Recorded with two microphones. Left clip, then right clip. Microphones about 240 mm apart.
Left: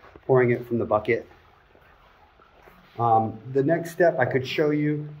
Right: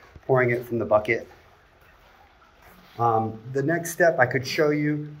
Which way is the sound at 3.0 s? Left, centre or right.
Centre.